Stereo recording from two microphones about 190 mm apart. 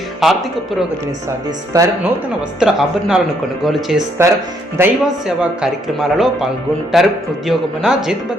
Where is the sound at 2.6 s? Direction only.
5° right (ahead or behind).